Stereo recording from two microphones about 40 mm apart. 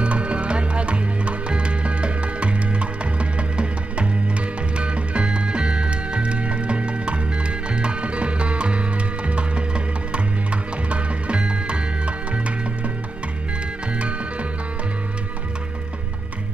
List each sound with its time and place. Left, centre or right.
0.0 s music: right